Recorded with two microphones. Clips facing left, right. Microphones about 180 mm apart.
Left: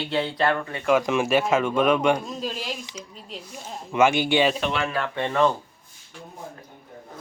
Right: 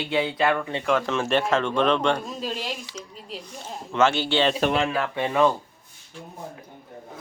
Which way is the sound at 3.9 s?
10° left (ahead or behind).